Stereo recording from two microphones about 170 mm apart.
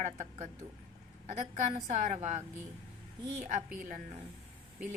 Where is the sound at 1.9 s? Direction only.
50° right (ahead or behind).